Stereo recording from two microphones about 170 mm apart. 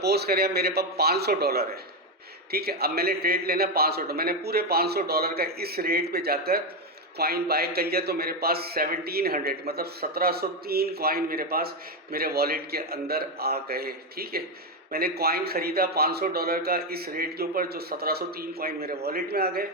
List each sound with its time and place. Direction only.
0.0 s a man's voice: 70° right (ahead or behind)